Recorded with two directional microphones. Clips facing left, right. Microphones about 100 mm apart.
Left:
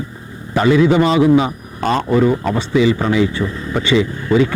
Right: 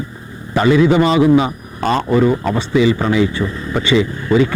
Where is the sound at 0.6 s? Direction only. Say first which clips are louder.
Even; 20° right (ahead or behind).